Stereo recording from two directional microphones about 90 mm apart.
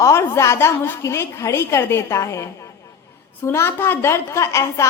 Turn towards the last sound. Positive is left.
turn(degrees=35)  # may be behind; listen again after turning